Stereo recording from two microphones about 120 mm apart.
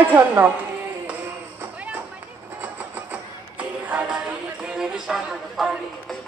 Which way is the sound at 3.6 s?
10° right (ahead or behind).